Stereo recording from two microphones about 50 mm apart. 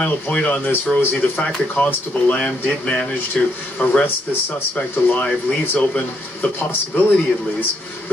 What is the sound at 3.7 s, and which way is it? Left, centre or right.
Speech, left.